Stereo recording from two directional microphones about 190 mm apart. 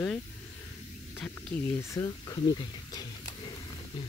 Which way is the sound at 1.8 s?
15° left (ahead or behind).